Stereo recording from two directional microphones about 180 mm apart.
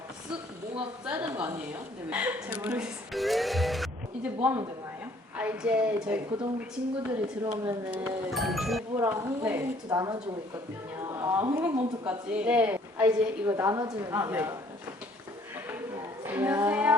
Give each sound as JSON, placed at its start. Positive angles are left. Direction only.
{"t": 0.8, "sound": "a woman's voice", "side_deg": -5}
{"t": 7.4, "sound": "speech", "side_deg": -20}
{"t": 7.9, "sound": "speech", "side_deg": -5}
{"t": 9.0, "sound": "a woman's voice", "side_deg": -15}
{"t": 11.1, "sound": "a sound", "side_deg": -15}
{"t": 11.5, "sound": "a woman's voice", "side_deg": -10}
{"t": 16.2, "sound": "speech", "side_deg": -10}